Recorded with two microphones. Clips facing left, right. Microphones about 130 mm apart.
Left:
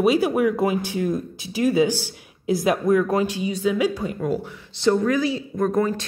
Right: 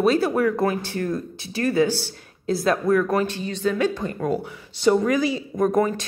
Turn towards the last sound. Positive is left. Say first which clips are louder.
# right 1 dB
turn(degrees=0)  # may be behind; listen again after turning